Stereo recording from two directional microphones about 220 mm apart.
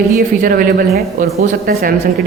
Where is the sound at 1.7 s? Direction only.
40° right (ahead or behind).